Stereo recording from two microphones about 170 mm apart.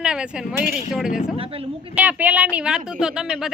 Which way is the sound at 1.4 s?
35° right (ahead or behind).